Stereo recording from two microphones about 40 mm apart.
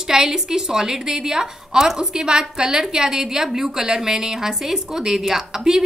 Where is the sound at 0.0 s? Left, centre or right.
Centre.